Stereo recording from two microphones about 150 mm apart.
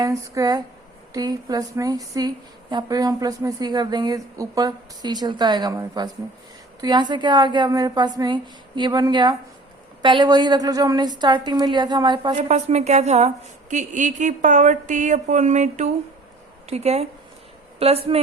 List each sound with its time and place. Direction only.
0.0 s a woman's voice: 20° right (ahead or behind)
12.5 s a woman's voice: 45° right (ahead or behind)